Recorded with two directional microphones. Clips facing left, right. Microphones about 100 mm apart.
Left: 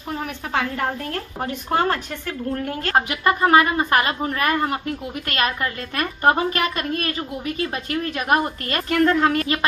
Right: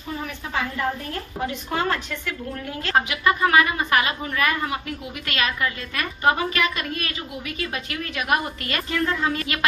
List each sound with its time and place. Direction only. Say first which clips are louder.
0.5 s a woman's voice: left 3 dB; 65° left (ahead or behind)
1.7 s a woman's voice: left 5 dB; 45° left (ahead or behind)
8.9 s a woman's voice: left 7 dB; 60° left (ahead or behind)